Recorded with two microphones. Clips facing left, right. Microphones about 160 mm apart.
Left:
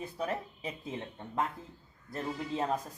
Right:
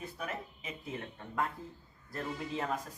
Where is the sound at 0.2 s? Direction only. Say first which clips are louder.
Left 8 dB; 35° left (ahead or behind).